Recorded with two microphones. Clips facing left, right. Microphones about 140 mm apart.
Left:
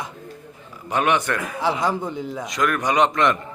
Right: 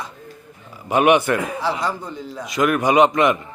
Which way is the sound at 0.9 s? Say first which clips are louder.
Right 6 dB; 15° right (ahead or behind).